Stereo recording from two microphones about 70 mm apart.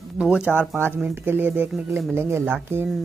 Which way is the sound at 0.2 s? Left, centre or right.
Centre.